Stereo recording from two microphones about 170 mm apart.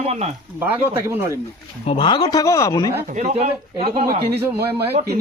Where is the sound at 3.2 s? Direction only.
40° right (ahead or behind).